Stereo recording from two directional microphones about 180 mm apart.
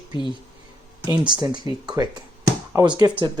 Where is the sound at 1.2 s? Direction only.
25° right (ahead or behind).